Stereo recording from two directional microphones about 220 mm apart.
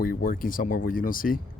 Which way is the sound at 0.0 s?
40° left (ahead or behind).